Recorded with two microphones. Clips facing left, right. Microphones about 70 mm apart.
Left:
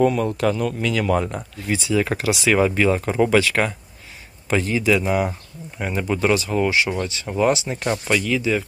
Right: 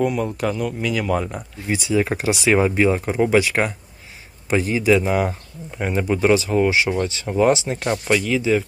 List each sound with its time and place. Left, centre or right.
0.0 s speech: centre
1.1 s speech: centre
1.5 s speech: right